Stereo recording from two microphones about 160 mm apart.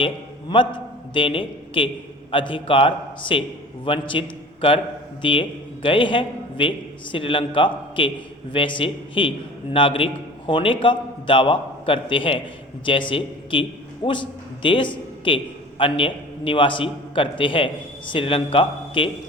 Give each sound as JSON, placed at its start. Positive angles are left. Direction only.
{"t": 0.0, "sound": "a man's voice", "side_deg": 30}